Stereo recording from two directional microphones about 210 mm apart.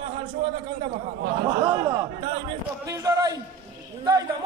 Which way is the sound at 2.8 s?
15° right (ahead or behind).